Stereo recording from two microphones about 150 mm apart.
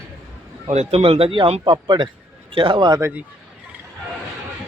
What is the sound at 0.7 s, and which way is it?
Speech, 45° right (ahead or behind).